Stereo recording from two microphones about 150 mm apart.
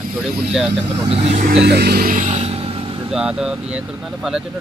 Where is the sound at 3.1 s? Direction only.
5° right (ahead or behind).